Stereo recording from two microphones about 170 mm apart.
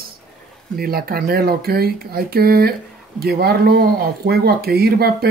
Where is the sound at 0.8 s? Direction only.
60° right (ahead or behind).